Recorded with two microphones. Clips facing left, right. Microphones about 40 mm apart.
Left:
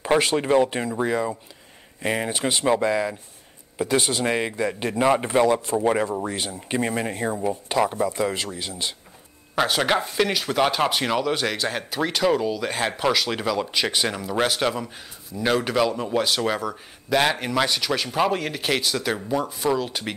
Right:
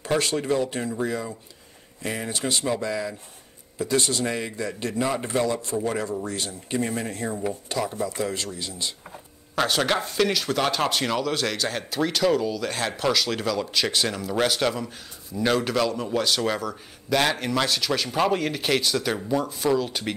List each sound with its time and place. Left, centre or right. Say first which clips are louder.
0.0 s a man's voice: left 4 dB; left
9.6 s speech: left 2 dB; centre